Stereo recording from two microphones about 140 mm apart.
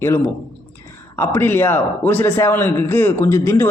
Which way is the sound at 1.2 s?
15° left (ahead or behind).